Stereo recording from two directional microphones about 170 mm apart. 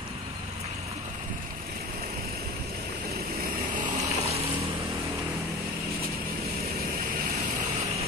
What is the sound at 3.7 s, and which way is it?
Vehicle, 45° right (ahead or behind).